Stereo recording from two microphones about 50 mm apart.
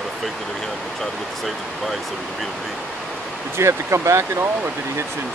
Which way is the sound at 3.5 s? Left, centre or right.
Right.